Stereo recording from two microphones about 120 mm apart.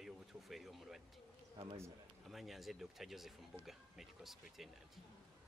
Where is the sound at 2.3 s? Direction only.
Centre (ahead or behind).